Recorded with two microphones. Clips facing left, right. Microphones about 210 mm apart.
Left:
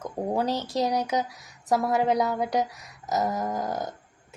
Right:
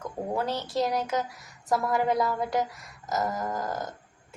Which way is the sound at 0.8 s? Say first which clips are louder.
Left 1 dB; 20° left (ahead or behind).